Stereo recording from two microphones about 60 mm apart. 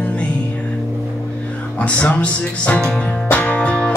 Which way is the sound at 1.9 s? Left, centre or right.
Centre.